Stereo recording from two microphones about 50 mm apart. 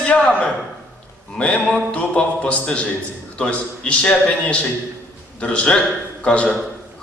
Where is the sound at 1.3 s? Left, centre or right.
Left.